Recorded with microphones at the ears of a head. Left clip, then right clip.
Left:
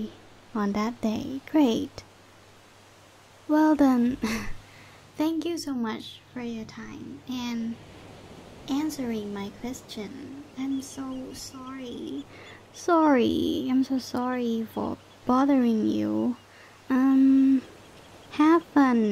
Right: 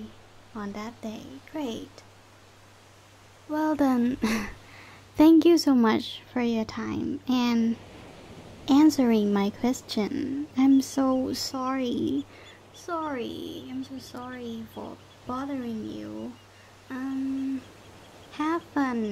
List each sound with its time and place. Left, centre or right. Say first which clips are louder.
0.0 s a woman's voice: left 6 dB; left
5.1 s speech: right 10 dB; right
8.0 s pink noise: even; centre
8.6 s speech: right 10 dB; right
12.7 s a woman's voice: left 10 dB; left